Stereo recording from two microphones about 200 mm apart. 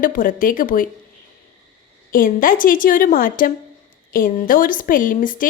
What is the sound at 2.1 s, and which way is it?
A woman's voice, 45° left (ahead or behind).